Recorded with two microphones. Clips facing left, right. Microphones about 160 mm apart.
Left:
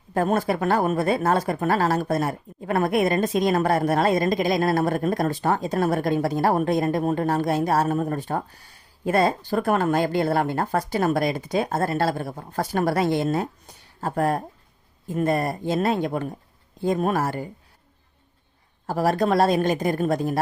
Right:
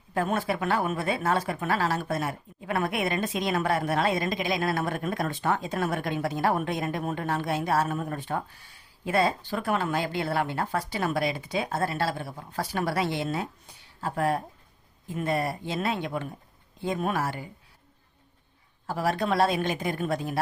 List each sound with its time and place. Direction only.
0.1 s speech: 40° left (ahead or behind)
18.9 s speech: 40° left (ahead or behind)